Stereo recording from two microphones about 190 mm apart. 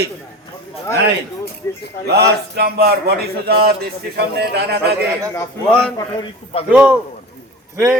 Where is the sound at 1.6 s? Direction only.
15° left (ahead or behind).